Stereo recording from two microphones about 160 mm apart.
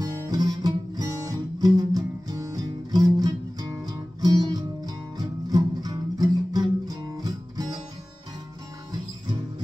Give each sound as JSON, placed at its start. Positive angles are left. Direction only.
{"t": 0.0, "sound": "music", "side_deg": -25}